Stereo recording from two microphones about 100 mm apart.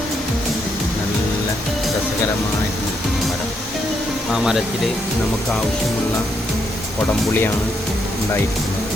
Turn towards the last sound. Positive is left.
turn(degrees=20)  # may be behind; listen again after turning